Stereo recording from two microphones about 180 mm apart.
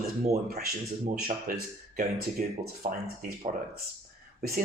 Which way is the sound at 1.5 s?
50° right (ahead or behind).